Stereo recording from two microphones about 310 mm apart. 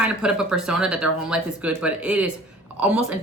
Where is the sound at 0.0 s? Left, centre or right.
Centre.